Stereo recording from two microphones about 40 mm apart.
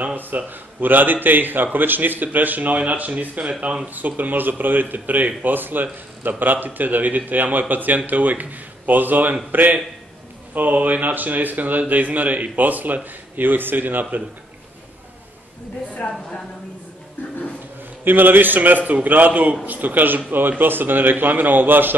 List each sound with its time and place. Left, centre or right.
0.0 s a man's voice: right
3.9 s speech: right
16.1 s a woman's voice: centre
18.0 s a man's voice: right